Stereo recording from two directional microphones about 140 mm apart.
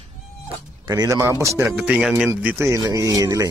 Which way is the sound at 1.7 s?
5° right (ahead or behind).